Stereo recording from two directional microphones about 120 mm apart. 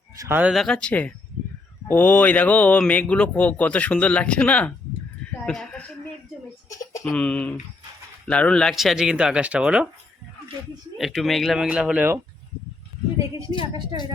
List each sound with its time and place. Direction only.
0.2 s speech: 15° right (ahead or behind)
0.5 s speech: 5° left (ahead or behind)
7.0 s speech: 10° left (ahead or behind); by 9.8 s 10° right (ahead or behind)
10.9 s speech: centre (ahead or behind)
13.1 s a woman's voice: 30° right (ahead or behind)